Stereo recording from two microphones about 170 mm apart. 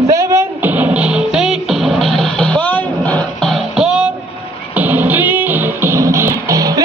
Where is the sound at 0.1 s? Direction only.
15° right (ahead or behind).